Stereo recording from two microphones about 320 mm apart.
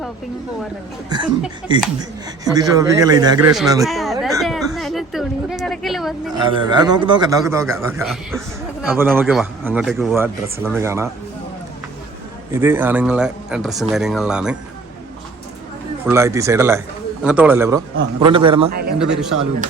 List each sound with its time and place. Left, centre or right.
1.1 s a man's voice: centre
3.8 s a sound: centre
6.6 s a man's voice: centre
12.5 s speech: centre
16.0 s a man's voice: centre
18.7 s a man's voice: right